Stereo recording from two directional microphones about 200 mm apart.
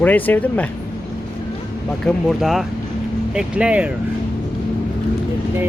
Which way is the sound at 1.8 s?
Centre (ahead or behind).